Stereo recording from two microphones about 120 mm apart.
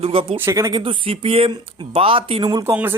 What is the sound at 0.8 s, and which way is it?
A man's voice, 50° right (ahead or behind).